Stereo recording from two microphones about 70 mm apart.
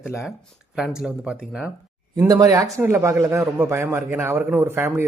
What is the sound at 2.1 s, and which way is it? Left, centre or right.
Speech, right.